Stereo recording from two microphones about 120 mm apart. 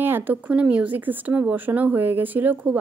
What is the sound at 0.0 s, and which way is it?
Speech, 15° right (ahead or behind).